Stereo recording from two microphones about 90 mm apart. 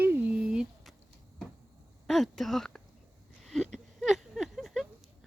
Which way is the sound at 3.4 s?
Centre (ahead or behind).